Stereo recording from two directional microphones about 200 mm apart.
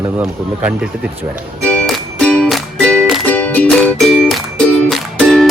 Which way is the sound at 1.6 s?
5° left (ahead or behind).